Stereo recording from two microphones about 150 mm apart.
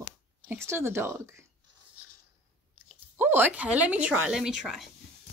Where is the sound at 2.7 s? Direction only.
10° right (ahead or behind).